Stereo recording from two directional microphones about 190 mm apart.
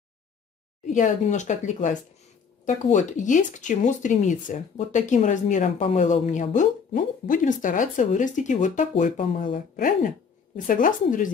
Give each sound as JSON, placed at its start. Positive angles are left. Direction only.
{"t": 0.8, "sound": "a woman's voice", "side_deg": 40}
{"t": 9.2, "sound": "speech", "side_deg": 30}
{"t": 9.5, "sound": "speech", "side_deg": 45}